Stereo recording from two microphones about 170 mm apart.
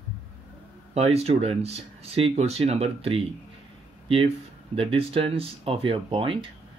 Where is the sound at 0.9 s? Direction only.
40° right (ahead or behind).